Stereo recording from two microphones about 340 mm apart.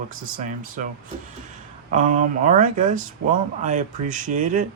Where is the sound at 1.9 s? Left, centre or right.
Right.